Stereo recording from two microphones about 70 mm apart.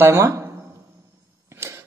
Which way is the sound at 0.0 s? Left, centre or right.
Right.